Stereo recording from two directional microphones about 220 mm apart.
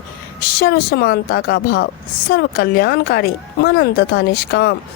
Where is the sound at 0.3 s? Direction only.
45° left (ahead or behind).